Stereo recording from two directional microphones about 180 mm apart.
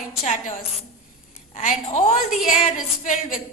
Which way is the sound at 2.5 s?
45° left (ahead or behind).